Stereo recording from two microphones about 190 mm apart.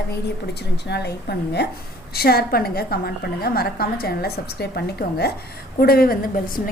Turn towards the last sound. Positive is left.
turn(degrees=50)  # may be behind; listen again after turning